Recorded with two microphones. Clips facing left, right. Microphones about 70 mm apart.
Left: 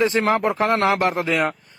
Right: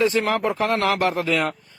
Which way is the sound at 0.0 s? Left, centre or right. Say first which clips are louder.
Left 2 dB; left.